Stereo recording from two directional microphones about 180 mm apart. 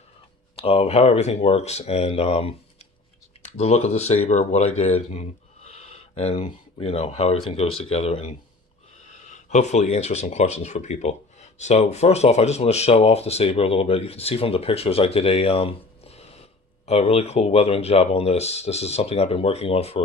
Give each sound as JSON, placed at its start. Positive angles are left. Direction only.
{"t": 0.5, "sound": "speech", "side_deg": 30}
{"t": 3.6, "sound": "speech", "side_deg": 35}
{"t": 9.5, "sound": "speech", "side_deg": 40}